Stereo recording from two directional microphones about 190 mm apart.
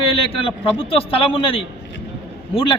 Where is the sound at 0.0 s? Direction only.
30° left (ahead or behind).